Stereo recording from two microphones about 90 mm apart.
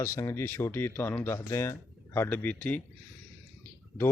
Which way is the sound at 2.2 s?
20° left (ahead or behind).